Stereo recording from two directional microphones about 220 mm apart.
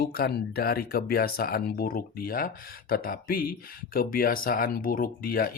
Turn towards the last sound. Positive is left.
turn(degrees=40)  # may be behind; listen again after turning